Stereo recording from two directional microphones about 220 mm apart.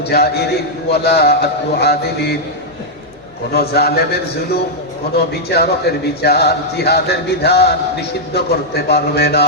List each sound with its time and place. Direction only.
0.0 s a man's voice: 45° left (ahead or behind)
3.5 s speech: 45° left (ahead or behind)